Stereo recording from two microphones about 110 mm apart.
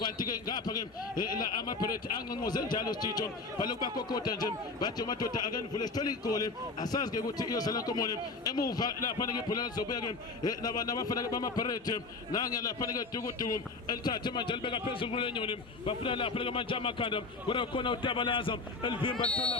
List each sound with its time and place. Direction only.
0.0 s a man's voice: 40° left (ahead or behind)